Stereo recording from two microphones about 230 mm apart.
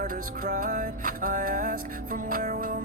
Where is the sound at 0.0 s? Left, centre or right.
Right.